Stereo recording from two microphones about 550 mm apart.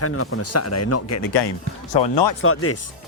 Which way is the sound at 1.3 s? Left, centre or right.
Left.